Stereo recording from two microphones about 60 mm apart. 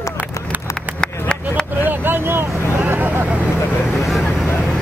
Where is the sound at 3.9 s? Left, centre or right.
Centre.